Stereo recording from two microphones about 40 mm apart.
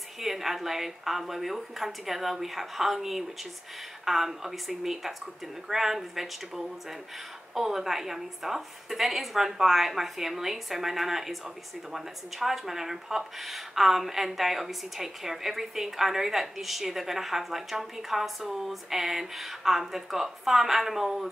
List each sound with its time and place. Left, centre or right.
0.2 s speech: centre